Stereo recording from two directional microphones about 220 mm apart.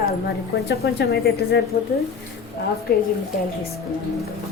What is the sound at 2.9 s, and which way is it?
Speech, 45° left (ahead or behind).